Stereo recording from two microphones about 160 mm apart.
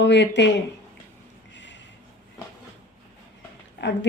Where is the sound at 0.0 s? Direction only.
90° left.